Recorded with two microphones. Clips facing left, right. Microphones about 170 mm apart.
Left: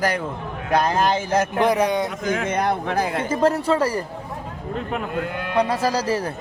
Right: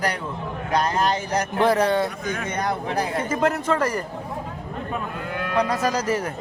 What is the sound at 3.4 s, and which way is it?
Speech, 30° left (ahead or behind).